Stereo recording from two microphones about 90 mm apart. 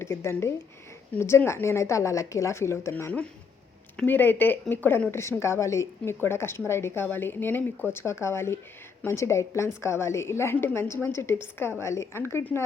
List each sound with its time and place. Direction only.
0.0 s a woman's voice: 30° left (ahead or behind)
4.0 s a woman's voice: 20° left (ahead or behind)
5.4 s a woman's voice: 35° left (ahead or behind)